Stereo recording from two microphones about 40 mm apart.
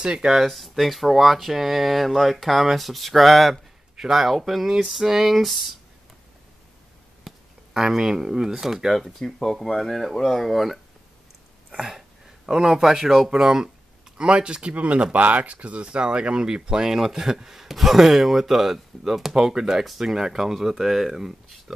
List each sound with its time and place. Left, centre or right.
0.0 s speech: centre
0.3 s speech: centre
7.3 s a sound: centre
7.8 s speech: centre
8.9 s speech: centre
12.4 s a man's voice: centre
13.3 s speech: centre